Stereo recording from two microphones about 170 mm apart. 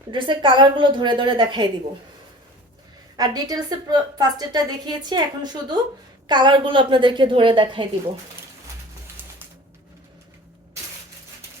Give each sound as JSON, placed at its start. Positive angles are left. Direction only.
{"t": 0.1, "sound": "a woman's voice", "side_deg": -30}
{"t": 3.2, "sound": "a woman's voice", "side_deg": -25}
{"t": 9.2, "sound": "music", "side_deg": -10}